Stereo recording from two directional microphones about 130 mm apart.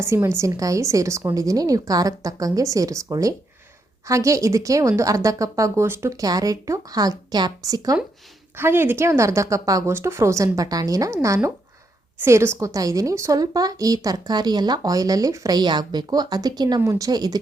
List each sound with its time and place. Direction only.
0.0 s a woman's voice: 20° right (ahead or behind)